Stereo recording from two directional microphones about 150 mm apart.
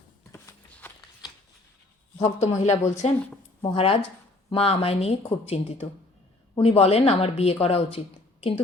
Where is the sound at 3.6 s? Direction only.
35° left (ahead or behind).